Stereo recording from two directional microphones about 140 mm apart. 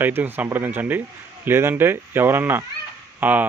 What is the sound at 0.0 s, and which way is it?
A child's voice, 15° right (ahead or behind).